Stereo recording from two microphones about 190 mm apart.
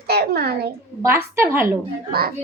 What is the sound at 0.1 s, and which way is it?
Speech, 55° right (ahead or behind).